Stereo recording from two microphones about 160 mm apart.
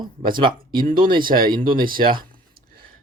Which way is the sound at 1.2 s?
60° right (ahead or behind).